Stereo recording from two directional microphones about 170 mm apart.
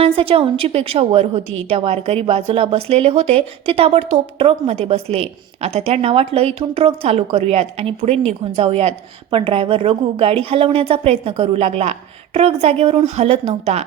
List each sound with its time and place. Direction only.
0.0 s a woman's voice: 35° right (ahead or behind)